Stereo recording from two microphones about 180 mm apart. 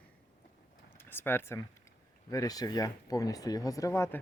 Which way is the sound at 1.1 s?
10° left (ahead or behind).